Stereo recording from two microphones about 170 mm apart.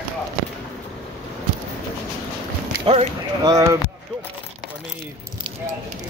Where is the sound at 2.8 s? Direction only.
30° right (ahead or behind).